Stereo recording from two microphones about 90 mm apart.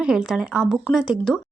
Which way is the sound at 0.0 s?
10° right (ahead or behind).